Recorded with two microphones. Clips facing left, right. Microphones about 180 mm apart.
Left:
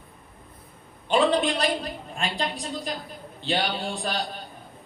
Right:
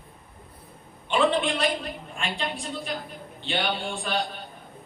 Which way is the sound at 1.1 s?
35° left (ahead or behind).